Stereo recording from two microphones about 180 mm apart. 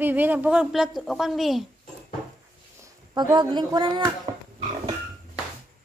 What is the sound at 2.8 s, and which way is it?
Speech, 25° right (ahead or behind).